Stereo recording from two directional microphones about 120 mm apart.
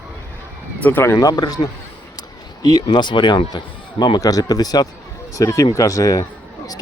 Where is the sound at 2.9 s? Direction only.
40° left (ahead or behind).